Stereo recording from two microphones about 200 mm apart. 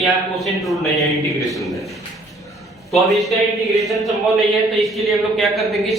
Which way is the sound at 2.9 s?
Centre (ahead or behind).